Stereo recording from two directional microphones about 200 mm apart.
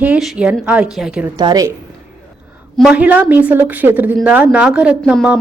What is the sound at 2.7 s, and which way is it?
A woman's voice, 5° right (ahead or behind).